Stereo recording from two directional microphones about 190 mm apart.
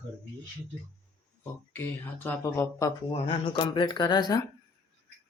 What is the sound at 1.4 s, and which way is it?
Speech, 10° left (ahead or behind).